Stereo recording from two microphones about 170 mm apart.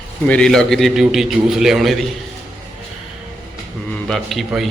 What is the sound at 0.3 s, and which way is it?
A man's voice, 5° left (ahead or behind).